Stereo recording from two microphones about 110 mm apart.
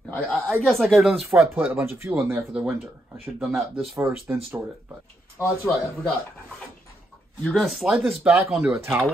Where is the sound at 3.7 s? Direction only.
20° right (ahead or behind).